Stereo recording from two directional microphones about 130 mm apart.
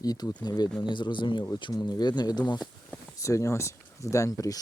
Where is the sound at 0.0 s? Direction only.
30° left (ahead or behind).